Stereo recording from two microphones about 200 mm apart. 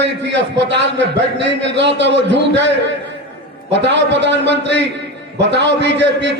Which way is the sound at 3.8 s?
60° right (ahead or behind).